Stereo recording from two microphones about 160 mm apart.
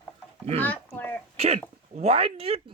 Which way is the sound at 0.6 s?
10° left (ahead or behind).